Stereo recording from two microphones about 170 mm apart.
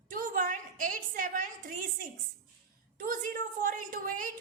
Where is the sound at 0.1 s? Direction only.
50° right (ahead or behind).